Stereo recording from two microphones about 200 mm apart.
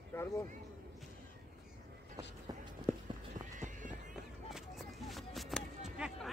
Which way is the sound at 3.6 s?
40° right (ahead or behind).